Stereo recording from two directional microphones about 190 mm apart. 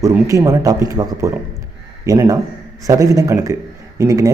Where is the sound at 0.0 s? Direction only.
15° right (ahead or behind).